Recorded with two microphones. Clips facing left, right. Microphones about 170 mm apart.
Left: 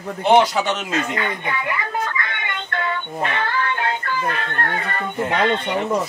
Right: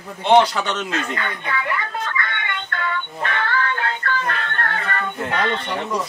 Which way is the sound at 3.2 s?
15° left (ahead or behind).